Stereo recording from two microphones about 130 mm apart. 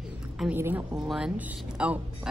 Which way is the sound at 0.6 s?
15° right (ahead or behind).